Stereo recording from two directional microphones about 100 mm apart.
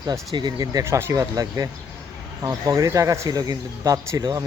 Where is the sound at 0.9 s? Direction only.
25° right (ahead or behind).